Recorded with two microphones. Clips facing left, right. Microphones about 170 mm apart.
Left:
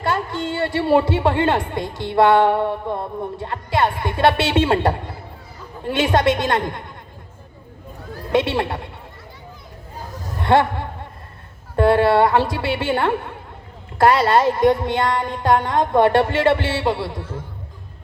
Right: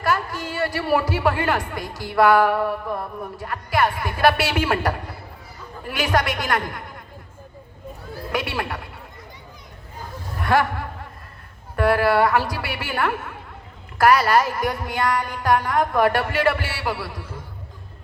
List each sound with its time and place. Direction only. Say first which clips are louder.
0.0 s speech: left 2 dB; 25° left (ahead or behind)
8.3 s speech: left 7 dB; 25° left (ahead or behind)
10.4 s speech: left 4 dB; 25° left (ahead or behind)